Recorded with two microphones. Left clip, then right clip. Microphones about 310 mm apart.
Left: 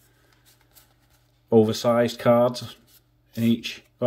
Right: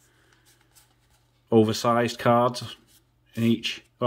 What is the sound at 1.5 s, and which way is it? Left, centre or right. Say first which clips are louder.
Speech: left 2 dB; centre.